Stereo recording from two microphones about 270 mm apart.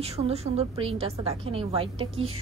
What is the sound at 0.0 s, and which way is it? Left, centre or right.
A woman's voice, right.